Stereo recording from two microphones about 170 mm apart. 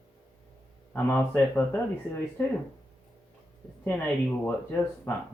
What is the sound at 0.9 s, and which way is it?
Speech, 10° left (ahead or behind).